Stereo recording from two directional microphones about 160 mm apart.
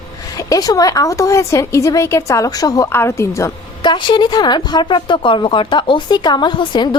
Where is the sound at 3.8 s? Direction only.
30° left (ahead or behind).